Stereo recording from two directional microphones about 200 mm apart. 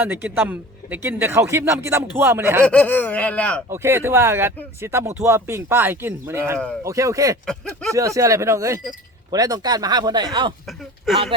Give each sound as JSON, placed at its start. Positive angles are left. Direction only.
{"t": 0.0, "sound": "speech", "side_deg": -10}
{"t": 2.6, "sound": "speech", "side_deg": 5}
{"t": 3.7, "sound": "speech", "side_deg": -10}
{"t": 10.7, "sound": "speech", "side_deg": 0}